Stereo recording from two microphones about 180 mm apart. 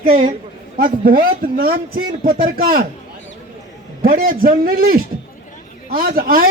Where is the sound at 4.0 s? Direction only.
50° right (ahead or behind).